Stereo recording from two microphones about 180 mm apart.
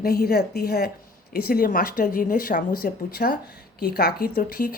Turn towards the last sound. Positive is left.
turn(degrees=55)  # may be behind; listen again after turning